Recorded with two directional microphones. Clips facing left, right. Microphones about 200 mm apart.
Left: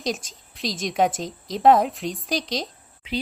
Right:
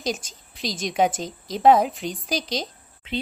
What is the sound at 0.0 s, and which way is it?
A woman's voice, centre (ahead or behind).